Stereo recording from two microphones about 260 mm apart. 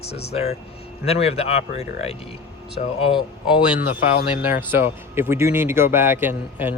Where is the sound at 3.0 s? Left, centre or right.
Centre.